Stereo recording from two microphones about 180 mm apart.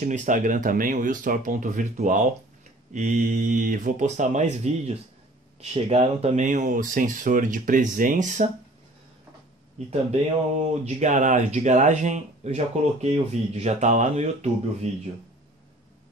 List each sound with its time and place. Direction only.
0.0 s speech: 45° right (ahead or behind)
9.8 s speech: 40° right (ahead or behind)
11.0 s speech: 40° right (ahead or behind)